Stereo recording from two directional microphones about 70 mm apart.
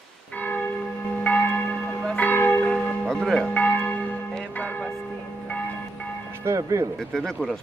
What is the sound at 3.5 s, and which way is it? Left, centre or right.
Church bell, left.